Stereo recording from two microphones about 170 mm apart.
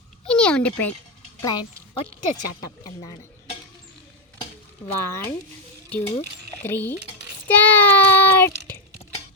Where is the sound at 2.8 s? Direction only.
25° left (ahead or behind).